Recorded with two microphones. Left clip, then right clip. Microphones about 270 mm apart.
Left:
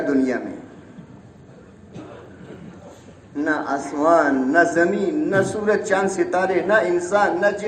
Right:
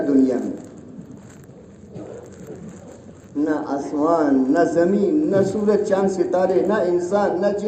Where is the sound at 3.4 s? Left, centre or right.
Left.